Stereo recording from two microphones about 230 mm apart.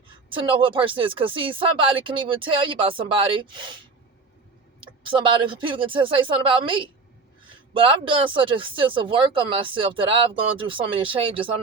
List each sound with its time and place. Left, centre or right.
0.3 s speech: right
4.8 s speech: right